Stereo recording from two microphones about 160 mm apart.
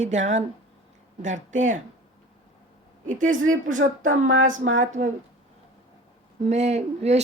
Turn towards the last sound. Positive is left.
turn(degrees=-45)  # may be behind; listen again after turning